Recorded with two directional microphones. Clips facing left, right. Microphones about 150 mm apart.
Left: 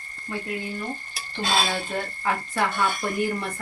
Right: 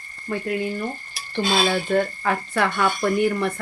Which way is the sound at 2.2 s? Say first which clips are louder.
Right 3 dB; 70° right (ahead or behind).